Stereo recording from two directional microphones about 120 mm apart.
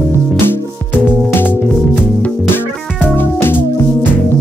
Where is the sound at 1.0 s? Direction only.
15° left (ahead or behind).